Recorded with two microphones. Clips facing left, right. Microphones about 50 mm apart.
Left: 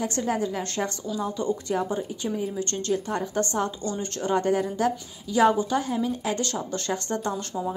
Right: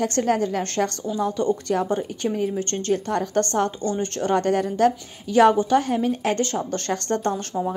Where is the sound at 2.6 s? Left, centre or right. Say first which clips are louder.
Right 3 dB; right.